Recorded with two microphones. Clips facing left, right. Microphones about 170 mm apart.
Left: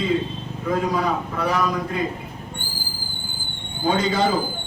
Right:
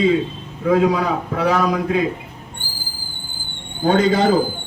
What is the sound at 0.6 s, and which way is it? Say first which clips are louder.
A man's voice: right 6 dB; 70° right (ahead or behind).